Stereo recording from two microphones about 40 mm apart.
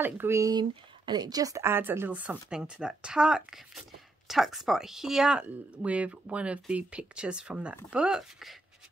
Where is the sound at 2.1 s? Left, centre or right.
Right.